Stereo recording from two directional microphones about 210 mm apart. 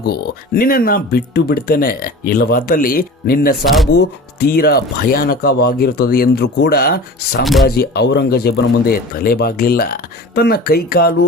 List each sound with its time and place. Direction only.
0.0 s speech: 45° left (ahead or behind)